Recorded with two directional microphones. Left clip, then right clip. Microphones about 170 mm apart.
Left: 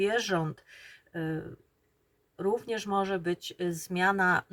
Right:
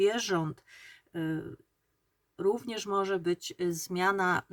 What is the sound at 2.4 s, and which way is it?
Speech, 25° right (ahead or behind).